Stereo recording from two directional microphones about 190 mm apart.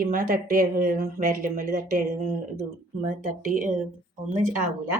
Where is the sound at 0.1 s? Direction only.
45° right (ahead or behind).